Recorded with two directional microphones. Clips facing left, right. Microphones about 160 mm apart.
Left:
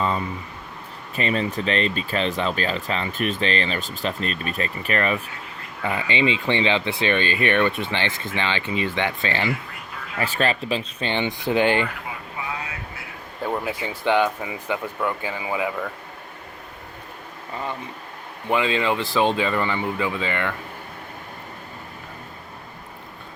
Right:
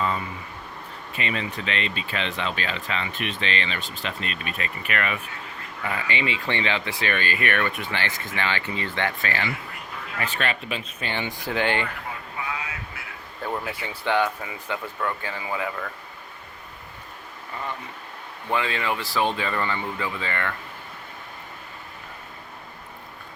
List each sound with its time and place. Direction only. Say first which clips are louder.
1.1 s speech: left 6 dB; 40° left (ahead or behind)
5.8 s speech: left 5 dB; 25° left (ahead or behind)
10.2 s speech: left 5 dB; 35° left (ahead or behind); by 11.9 s 20° left (ahead or behind)
13.4 s speech: left 4 dB; 15° left (ahead or behind)
18.4 s speech: left 4 dB; 20° left (ahead or behind)